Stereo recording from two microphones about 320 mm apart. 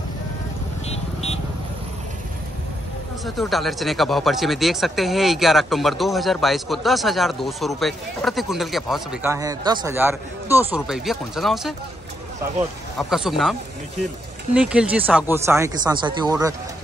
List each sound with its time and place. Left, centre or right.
0.8 s vehicle: centre
3.3 s speech: centre